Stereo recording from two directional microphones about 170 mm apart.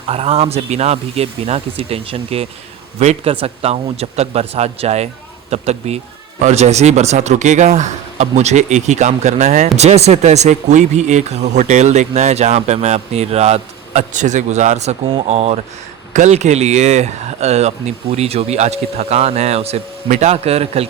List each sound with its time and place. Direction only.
0.1 s speech: 35° right (ahead or behind)